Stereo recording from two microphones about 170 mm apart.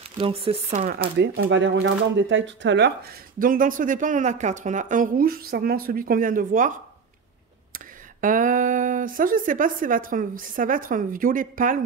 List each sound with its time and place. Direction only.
0.2 s speech: 35° right (ahead or behind)
1.2 s speech: 85° right; by 6.7 s 55° right (ahead or behind)
7.7 s speech: 50° right (ahead or behind)